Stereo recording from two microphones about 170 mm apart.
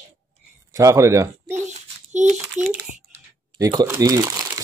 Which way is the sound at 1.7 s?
45° right (ahead or behind).